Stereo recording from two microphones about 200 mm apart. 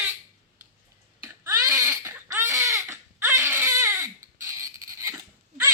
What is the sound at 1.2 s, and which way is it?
Baby cry, 15° right (ahead or behind).